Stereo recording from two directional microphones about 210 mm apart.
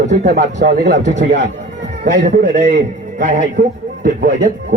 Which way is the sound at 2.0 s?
35° right (ahead or behind).